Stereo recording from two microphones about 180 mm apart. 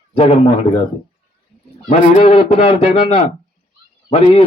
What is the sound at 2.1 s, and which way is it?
A man's voice, 35° left (ahead or behind).